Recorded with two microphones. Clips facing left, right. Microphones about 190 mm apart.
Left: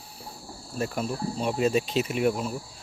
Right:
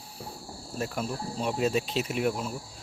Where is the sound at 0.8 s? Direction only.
Centre (ahead or behind).